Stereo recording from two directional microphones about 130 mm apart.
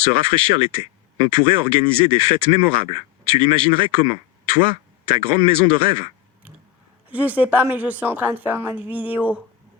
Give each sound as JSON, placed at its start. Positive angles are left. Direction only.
{"t": 0.0, "sound": "speech", "side_deg": -40}
{"t": 7.1, "sound": "a woman's voice", "side_deg": -10}